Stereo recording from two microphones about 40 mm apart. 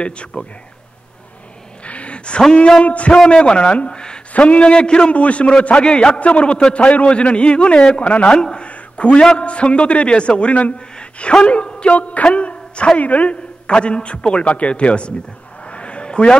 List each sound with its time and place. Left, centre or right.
1.9 s a sound: left
2.8 s a man's voice: left
3.3 s a man's voice: left
4.3 s a man's voice: left
5.1 s a man's voice: left
8.4 s a man's voice: centre
8.6 s a sound: left
9.4 s a man's voice: left
12.3 s a sound: left
13.0 s a man's voice: left
13.7 s a man's voice: left
15.6 s a sound: left